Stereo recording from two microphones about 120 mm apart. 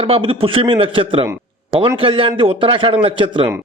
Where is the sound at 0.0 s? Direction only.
50° right (ahead or behind).